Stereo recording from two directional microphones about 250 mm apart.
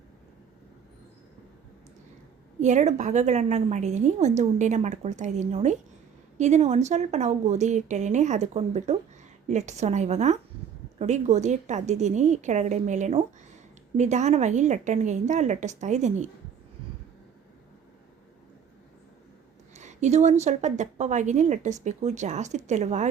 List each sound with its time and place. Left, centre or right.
2.6 s a woman's voice: right
19.7 s a woman's voice: right